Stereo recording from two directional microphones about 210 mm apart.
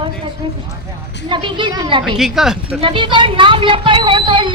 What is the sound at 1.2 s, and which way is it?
Speech, 25° right (ahead or behind).